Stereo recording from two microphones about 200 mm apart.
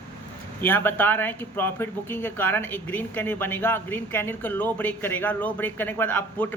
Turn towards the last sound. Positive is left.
turn(degrees=10)  # may be behind; listen again after turning